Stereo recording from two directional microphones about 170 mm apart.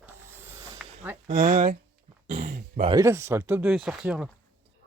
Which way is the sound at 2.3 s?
50° right (ahead or behind).